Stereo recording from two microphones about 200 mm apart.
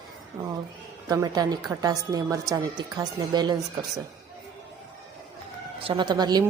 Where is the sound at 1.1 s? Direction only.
20° right (ahead or behind).